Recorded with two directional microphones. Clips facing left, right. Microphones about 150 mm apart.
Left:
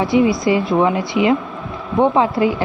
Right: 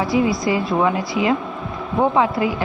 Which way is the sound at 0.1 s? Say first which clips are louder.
Left 5 dB; 25° left (ahead or behind).